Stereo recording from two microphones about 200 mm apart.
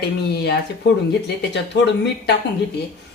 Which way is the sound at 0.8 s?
60° left (ahead or behind).